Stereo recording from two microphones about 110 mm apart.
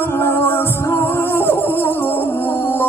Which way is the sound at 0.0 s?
20° left (ahead or behind).